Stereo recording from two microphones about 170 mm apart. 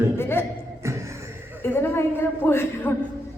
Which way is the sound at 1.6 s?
15° left (ahead or behind).